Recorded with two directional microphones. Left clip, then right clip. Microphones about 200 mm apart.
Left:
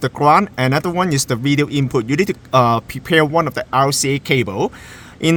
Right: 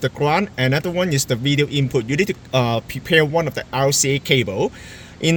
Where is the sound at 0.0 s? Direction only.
60° left (ahead or behind).